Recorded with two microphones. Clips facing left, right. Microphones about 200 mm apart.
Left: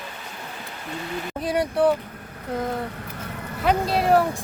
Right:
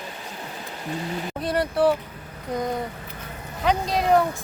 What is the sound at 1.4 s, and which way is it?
Speech, centre (ahead or behind).